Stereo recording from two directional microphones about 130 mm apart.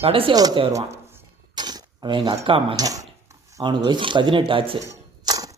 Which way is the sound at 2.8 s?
25° right (ahead or behind).